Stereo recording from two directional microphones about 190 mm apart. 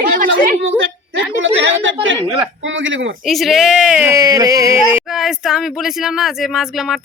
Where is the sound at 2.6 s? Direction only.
80° right.